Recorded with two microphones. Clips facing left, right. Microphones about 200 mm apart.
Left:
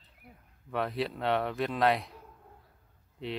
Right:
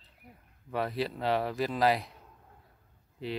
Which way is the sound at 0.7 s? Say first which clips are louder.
Even; centre (ahead or behind).